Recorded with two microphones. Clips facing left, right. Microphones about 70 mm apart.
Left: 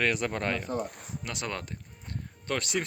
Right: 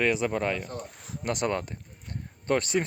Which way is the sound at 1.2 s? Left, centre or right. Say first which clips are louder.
Right 9 dB; right.